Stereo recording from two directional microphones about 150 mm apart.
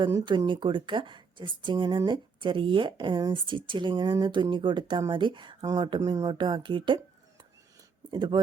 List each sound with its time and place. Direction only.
0.0 s speech: 30° right (ahead or behind)